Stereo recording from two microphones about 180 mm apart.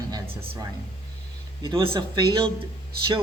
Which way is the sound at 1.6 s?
30° right (ahead or behind).